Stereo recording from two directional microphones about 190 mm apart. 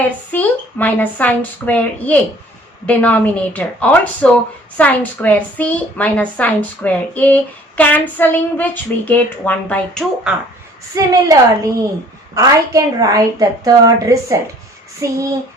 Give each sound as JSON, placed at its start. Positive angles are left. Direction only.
{"t": 0.0, "sound": "a woman's voice", "side_deg": 10}
{"t": 10.9, "sound": "a woman's voice", "side_deg": -20}